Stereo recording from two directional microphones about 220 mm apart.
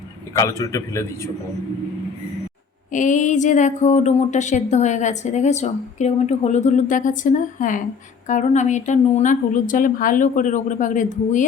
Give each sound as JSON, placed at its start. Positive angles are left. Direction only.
{"t": 0.3, "sound": "a man's voice", "side_deg": 15}
{"t": 2.9, "sound": "speech", "side_deg": 35}